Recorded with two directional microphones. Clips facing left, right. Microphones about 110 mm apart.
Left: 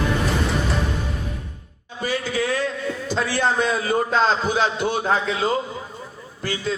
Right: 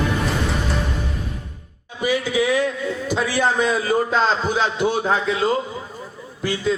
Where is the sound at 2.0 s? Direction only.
15° right (ahead or behind).